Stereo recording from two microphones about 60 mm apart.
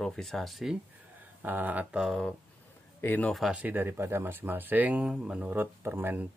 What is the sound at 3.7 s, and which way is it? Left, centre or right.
Speech, right.